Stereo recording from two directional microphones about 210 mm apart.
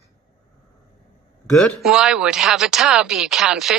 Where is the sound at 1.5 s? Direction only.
5° left (ahead or behind).